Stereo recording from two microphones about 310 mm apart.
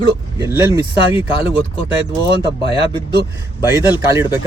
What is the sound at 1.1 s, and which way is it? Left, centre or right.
Speech, centre.